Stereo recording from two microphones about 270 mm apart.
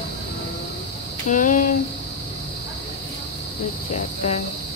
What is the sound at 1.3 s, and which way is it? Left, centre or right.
Speech, left.